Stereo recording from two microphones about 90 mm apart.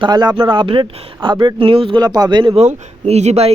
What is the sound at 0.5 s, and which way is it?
Speech, 65° right (ahead or behind).